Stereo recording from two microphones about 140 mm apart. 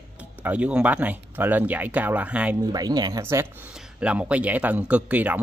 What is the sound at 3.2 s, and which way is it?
Speech, 15° right (ahead or behind).